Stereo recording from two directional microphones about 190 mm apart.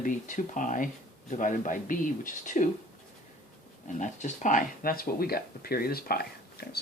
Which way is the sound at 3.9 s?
40° left (ahead or behind).